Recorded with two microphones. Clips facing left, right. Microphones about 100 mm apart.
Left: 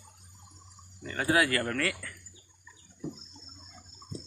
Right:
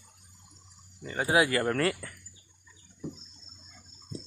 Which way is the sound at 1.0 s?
15° right (ahead or behind).